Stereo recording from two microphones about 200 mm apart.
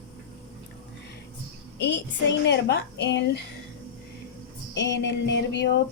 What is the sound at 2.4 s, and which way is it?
Speech, 55° left (ahead or behind).